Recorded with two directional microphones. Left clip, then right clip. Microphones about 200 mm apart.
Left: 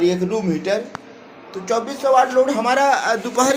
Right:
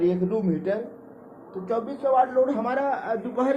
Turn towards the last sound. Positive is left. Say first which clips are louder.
# left 8 dB
turn(degrees=20)  # may be behind; listen again after turning